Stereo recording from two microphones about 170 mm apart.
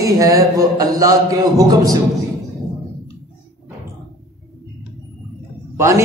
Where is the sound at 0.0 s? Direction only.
20° right (ahead or behind).